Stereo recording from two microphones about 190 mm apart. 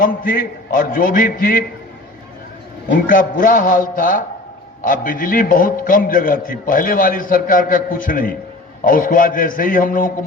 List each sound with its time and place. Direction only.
0.0 s a man's voice: 45° left (ahead or behind)
3.1 s a man's voice: 45° left (ahead or behind)